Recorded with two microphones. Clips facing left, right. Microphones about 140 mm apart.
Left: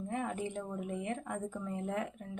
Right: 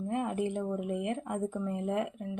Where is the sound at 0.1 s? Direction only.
10° right (ahead or behind).